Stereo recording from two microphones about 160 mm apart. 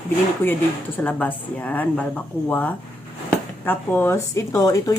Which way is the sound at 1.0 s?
10° left (ahead or behind).